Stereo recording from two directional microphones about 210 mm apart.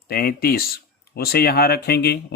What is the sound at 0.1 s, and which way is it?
Speech, 45° left (ahead or behind).